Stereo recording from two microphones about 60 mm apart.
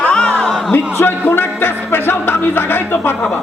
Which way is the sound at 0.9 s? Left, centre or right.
Left.